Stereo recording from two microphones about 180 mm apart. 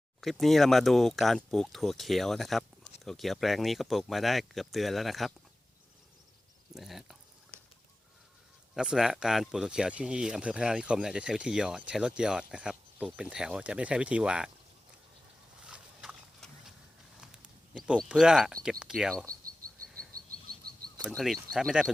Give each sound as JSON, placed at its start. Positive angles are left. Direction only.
{"t": 0.2, "sound": "speech", "side_deg": 0}
{"t": 6.7, "sound": "speech", "side_deg": 0}
{"t": 8.7, "sound": "speech", "side_deg": -5}
{"t": 15.6, "sound": "a sound", "side_deg": -5}
{"t": 17.2, "sound": "speech", "side_deg": -5}
{"t": 20.1, "sound": "a sound", "side_deg": -55}
{"t": 21.1, "sound": "speech", "side_deg": 0}